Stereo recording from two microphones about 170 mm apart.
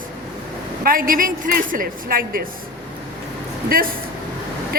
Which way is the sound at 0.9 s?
55° right (ahead or behind).